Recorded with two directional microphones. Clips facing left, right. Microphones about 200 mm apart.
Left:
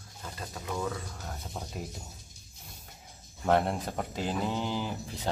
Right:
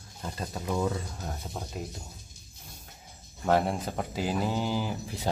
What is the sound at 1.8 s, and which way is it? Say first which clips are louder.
Speech: right 2 dB; centre (ahead or behind).